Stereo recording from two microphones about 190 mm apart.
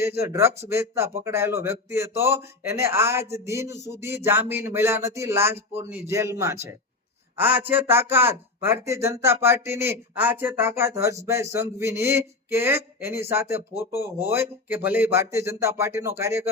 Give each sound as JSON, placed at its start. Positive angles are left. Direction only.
{"t": 0.0, "sound": "speech", "side_deg": -15}